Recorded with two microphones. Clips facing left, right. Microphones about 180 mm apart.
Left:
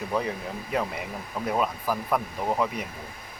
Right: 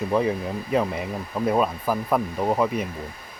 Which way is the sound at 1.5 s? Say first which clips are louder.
Right 2 dB; 25° right (ahead or behind).